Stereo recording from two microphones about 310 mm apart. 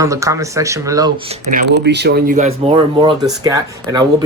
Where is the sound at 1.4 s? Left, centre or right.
Right.